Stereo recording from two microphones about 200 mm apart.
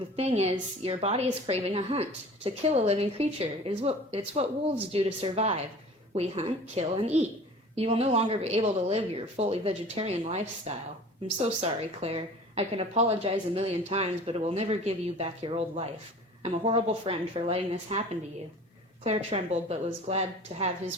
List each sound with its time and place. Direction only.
0.2 s a woman's voice: 30° right (ahead or behind)
19.0 s a woman's voice: 30° right (ahead or behind)